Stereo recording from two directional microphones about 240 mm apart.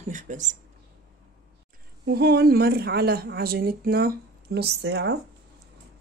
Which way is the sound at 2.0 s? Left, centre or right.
Right.